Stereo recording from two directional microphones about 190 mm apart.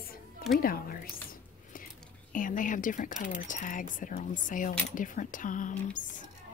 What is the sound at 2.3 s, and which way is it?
Speech, 45° left (ahead or behind).